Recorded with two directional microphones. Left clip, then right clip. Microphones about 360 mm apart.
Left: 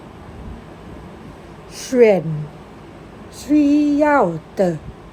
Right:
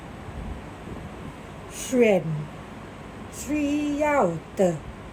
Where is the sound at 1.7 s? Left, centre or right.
Centre.